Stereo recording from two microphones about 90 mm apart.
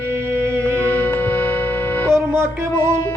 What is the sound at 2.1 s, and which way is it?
Music, 30° right (ahead or behind).